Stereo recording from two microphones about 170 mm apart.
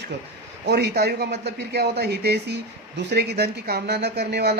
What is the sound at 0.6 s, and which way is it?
Speech, 75° right (ahead or behind).